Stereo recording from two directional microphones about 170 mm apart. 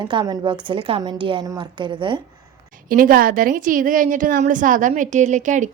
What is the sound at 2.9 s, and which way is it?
A woman's voice, 55° right (ahead or behind).